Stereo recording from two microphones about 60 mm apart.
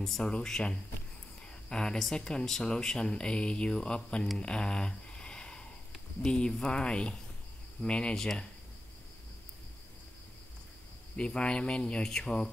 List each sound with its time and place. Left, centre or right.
0.0 s speech: centre
4.4 s a sound: centre
6.2 s speech: centre
11.1 s speech: centre